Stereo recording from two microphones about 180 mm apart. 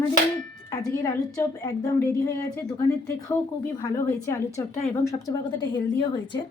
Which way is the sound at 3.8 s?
20° left (ahead or behind).